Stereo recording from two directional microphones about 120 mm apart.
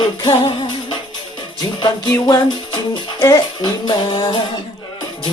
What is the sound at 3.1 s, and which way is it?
Music, 35° left (ahead or behind).